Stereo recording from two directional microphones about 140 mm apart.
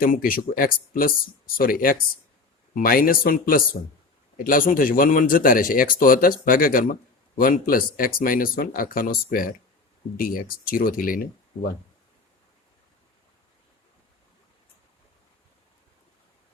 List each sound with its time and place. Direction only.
0.0 s a man's voice: 85° left